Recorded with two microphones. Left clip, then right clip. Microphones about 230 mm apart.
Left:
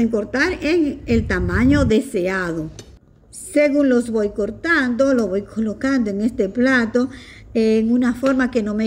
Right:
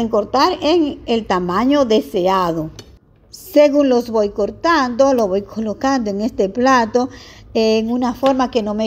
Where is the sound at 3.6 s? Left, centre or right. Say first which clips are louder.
Right 4 dB; centre.